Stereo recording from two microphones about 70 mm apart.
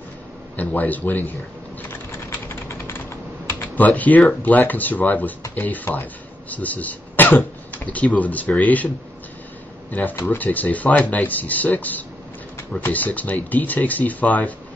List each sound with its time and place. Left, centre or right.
0.6 s speech: left
1.9 s typing: left
4.3 s speech: left
9.8 s speech: left